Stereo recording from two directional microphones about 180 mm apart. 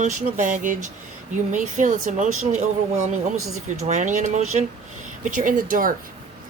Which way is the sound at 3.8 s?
40° right (ahead or behind).